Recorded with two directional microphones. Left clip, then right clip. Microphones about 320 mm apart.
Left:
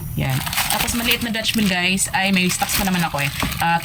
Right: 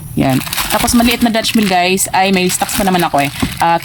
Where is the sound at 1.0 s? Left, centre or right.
Centre.